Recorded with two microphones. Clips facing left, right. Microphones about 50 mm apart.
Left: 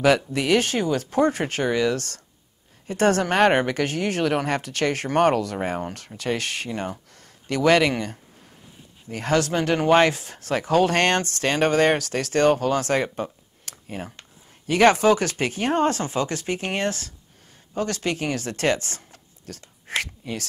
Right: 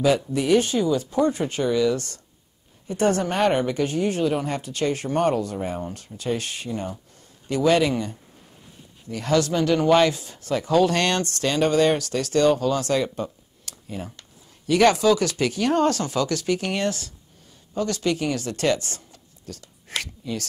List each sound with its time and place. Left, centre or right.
0.0 s speech: left
9.1 s speech: left